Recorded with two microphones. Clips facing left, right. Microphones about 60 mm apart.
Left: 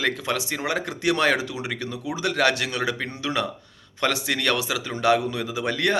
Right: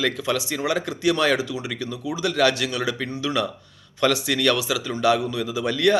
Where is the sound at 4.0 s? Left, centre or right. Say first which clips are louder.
Right 3 dB; left.